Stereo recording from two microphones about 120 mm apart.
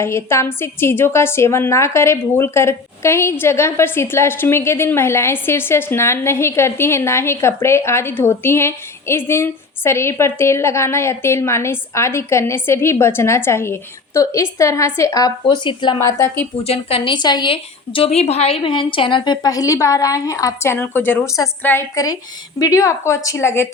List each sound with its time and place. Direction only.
0.0 s a woman's voice: 20° left (ahead or behind); by 16.0 s 40° left (ahead or behind)
16.0 s a woman's voice: 25° left (ahead or behind)
16.6 s a woman's voice: 55° left (ahead or behind)
17.2 s a woman's voice: 35° left (ahead or behind); by 21.8 s 20° left (ahead or behind)
21.9 s a woman's voice: 30° left (ahead or behind)